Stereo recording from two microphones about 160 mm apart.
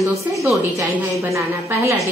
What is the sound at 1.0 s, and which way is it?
Speech, 15° right (ahead or behind).